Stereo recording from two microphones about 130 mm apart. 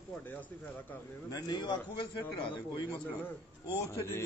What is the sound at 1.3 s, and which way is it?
A man's voice, 30° left (ahead or behind).